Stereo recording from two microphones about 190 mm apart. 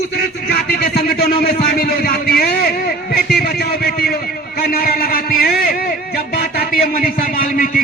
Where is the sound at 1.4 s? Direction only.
55° left (ahead or behind).